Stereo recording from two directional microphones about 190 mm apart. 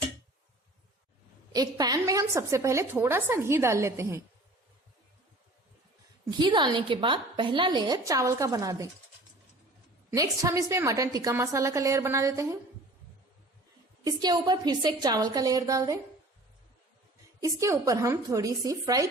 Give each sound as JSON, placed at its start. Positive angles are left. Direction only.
{"t": 1.5, "sound": "a woman's voice", "side_deg": -20}
{"t": 6.4, "sound": "a woman's voice", "side_deg": -25}
{"t": 10.1, "sound": "a woman's voice", "side_deg": -15}
{"t": 14.0, "sound": "a woman's voice", "side_deg": -20}
{"t": 17.4, "sound": "a woman's voice", "side_deg": -15}